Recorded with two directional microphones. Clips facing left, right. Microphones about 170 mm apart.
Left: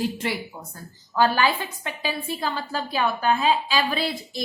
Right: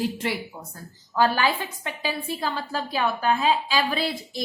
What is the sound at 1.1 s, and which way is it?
A woman's voice, 40° right (ahead or behind).